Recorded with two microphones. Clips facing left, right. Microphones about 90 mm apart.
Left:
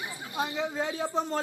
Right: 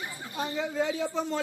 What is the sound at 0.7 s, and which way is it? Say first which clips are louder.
Speech: right 2 dB; 40° left (ahead or behind).